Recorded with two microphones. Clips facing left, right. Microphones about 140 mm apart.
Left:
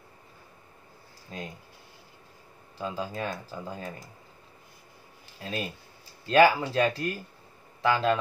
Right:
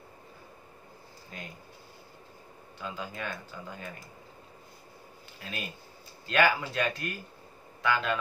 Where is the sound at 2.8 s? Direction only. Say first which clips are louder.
Left 5 dB; 35° left (ahead or behind).